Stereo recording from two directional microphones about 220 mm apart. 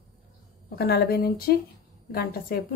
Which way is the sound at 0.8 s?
45° left (ahead or behind).